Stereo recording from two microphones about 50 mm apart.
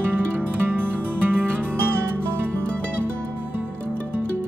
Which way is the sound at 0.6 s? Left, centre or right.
Right.